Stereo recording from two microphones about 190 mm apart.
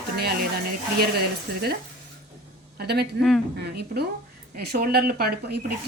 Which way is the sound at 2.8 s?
55° right (ahead or behind).